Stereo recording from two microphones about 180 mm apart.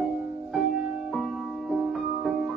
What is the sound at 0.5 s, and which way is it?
Music, centre (ahead or behind).